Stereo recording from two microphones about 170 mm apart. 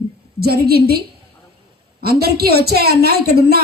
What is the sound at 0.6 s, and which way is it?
Speech, 65° right (ahead or behind).